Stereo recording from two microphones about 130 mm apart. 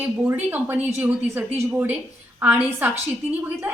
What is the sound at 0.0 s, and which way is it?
A woman's voice, 15° right (ahead or behind).